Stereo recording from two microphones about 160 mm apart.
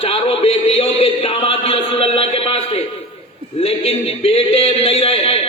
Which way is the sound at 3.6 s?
40° left (ahead or behind).